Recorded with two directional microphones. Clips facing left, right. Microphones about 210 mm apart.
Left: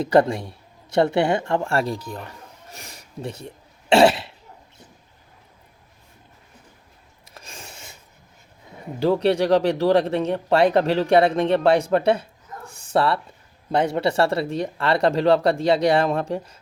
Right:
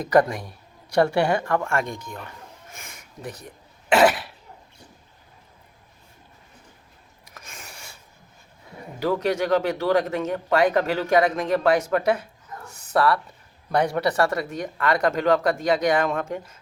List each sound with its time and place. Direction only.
0.0 s speech: 30° left (ahead or behind)
2.6 s cough: 35° left (ahead or behind)
7.3 s a sound: 30° left (ahead or behind)
9.0 s speech: 30° left (ahead or behind)